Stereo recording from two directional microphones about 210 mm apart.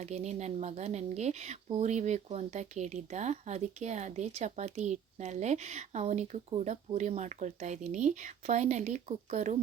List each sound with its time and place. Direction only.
0.0 s speech: 30° right (ahead or behind)